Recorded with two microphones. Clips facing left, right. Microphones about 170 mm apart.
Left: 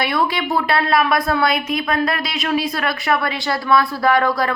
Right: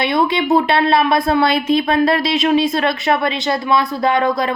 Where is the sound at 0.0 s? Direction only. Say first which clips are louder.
Right 4 dB; 25° right (ahead or behind).